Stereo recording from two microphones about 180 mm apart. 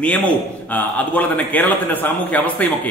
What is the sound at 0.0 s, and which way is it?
A man's voice, 10° left (ahead or behind).